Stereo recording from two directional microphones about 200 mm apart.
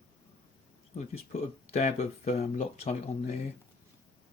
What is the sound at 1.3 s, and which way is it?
Speech, 35° left (ahead or behind).